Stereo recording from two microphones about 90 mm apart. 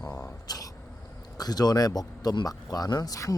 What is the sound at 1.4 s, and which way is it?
Speech, 50° left (ahead or behind).